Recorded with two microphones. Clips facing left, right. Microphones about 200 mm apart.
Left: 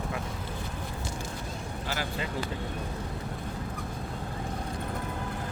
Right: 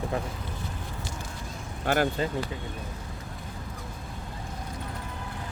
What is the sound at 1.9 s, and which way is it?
Speech, 55° right (ahead or behind).